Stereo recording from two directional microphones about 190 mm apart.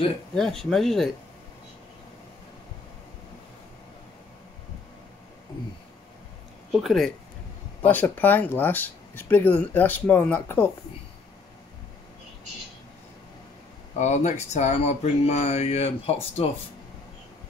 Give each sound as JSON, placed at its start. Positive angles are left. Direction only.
{"t": 0.3, "sound": "speech", "side_deg": 5}
{"t": 6.7, "sound": "speech", "side_deg": 0}
{"t": 13.9, "sound": "speech", "side_deg": 35}